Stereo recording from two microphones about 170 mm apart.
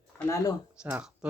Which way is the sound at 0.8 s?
5° right (ahead or behind).